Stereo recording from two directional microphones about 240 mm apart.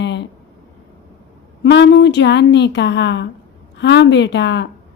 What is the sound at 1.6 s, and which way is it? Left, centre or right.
Speech, left.